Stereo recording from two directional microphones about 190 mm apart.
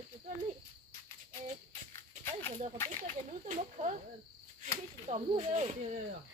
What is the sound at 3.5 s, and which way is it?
Snake, 40° right (ahead or behind).